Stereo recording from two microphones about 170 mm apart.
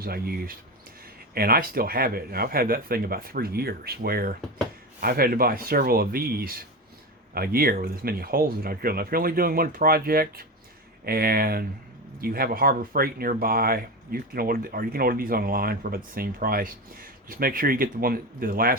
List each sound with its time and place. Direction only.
0.0 s speech: 60° right (ahead or behind)